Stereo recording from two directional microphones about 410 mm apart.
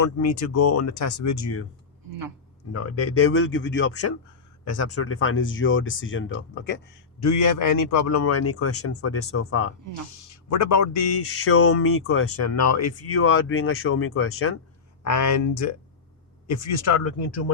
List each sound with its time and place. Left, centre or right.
0.0 s speech: left
2.7 s speech: left
7.2 s speech: left
15.0 s speech: left